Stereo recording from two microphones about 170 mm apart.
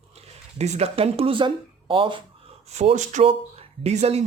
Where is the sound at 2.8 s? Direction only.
40° right (ahead or behind).